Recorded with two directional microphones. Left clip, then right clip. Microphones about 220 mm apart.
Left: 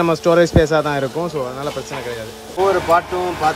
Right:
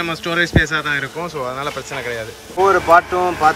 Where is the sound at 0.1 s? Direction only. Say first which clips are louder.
Left 4 dB; 30° left (ahead or behind).